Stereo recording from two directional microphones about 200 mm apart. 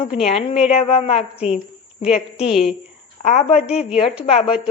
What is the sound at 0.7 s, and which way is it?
Speech, 30° left (ahead or behind).